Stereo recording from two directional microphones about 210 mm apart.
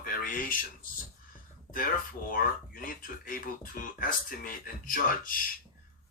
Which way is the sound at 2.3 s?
40° left (ahead or behind).